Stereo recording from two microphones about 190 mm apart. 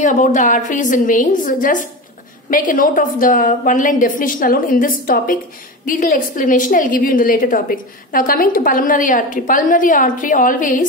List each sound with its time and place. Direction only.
0.0 s a woman's voice: 40° left (ahead or behind)